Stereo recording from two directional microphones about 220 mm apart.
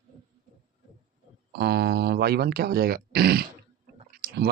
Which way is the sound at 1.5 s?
45° right (ahead or behind).